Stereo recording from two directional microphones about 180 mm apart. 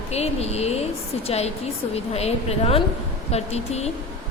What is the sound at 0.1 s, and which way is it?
A woman's voice, 35° left (ahead or behind).